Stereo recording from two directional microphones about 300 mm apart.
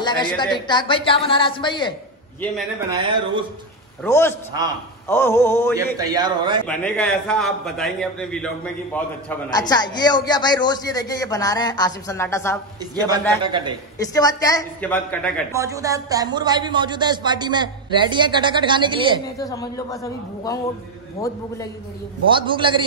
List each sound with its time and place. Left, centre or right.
0.0 s a woman's voice: centre
2.9 s speech: centre
4.0 s a man's voice: centre
5.9 s speech: centre
6.6 s a man's voice: centre
12.9 s speech: centre
14.0 s a man's voice: centre
15.5 s speech: centre
19.3 s a man's voice: centre
22.3 s speech: centre